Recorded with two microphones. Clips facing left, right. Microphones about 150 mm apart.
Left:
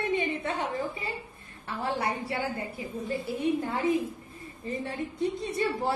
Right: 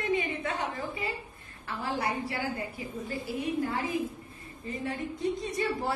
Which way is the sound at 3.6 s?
25° left (ahead or behind).